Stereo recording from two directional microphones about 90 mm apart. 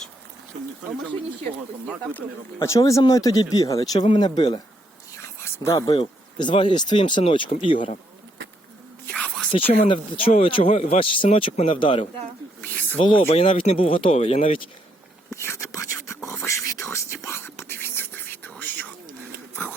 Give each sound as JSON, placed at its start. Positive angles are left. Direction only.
{"t": 2.6, "sound": "speech", "side_deg": 35}
{"t": 4.0, "sound": "speech", "side_deg": 65}
{"t": 5.4, "sound": "a sound", "side_deg": 30}
{"t": 5.7, "sound": "speech", "side_deg": 50}
{"t": 6.0, "sound": "speech", "side_deg": 70}
{"t": 9.1, "sound": "whispering", "side_deg": 10}
{"t": 9.5, "sound": "speech", "side_deg": 80}
{"t": 12.6, "sound": "snake", "side_deg": 15}
{"t": 13.0, "sound": "speech", "side_deg": 70}
{"t": 15.3, "sound": "whispering", "side_deg": 30}
{"t": 18.6, "sound": "a sound", "side_deg": 20}